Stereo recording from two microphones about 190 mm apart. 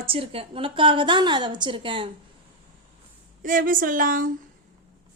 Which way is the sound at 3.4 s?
45° right (ahead or behind).